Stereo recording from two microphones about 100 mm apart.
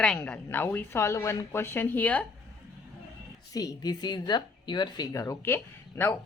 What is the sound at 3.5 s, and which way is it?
Speech, 40° left (ahead or behind).